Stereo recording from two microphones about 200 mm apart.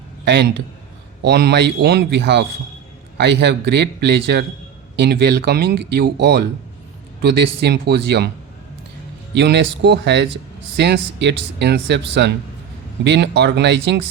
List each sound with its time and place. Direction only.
0.3 s speech: 60° right (ahead or behind)
9.3 s speech: 60° right (ahead or behind)